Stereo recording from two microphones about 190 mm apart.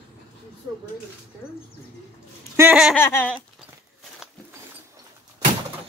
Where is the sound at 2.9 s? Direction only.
10° left (ahead or behind).